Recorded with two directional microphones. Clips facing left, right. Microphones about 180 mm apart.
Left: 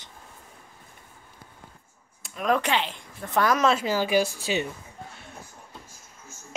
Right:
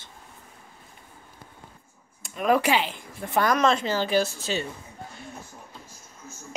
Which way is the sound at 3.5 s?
5° left (ahead or behind).